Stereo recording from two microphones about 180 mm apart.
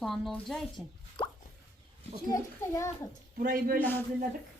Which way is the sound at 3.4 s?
55° right (ahead or behind).